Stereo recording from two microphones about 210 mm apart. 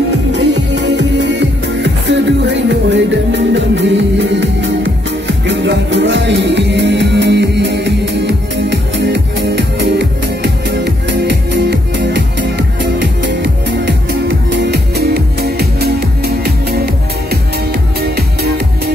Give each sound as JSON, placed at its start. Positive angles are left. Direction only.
{"t": 0.3, "sound": "music", "side_deg": -55}